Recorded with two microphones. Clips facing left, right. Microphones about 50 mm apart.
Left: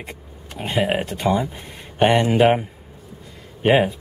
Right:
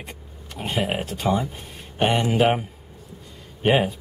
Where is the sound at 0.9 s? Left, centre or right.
Centre.